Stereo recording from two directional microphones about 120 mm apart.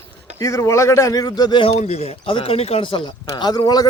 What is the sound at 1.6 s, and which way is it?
Speech, 60° left (ahead or behind).